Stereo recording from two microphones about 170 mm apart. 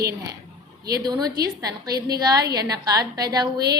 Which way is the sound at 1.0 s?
25° right (ahead or behind).